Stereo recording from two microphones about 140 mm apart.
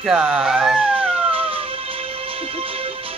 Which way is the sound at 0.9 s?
40° right (ahead or behind).